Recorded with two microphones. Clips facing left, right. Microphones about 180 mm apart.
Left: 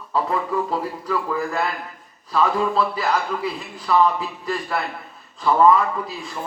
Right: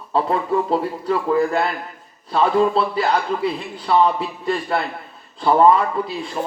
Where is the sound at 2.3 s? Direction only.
30° right (ahead or behind).